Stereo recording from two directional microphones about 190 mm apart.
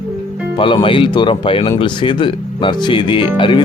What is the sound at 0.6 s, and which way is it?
Speech, 25° left (ahead or behind).